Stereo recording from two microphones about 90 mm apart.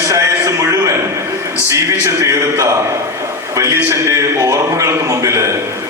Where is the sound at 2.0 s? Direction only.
35° right (ahead or behind).